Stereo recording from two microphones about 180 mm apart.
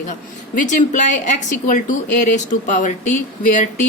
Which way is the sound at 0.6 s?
40° left (ahead or behind).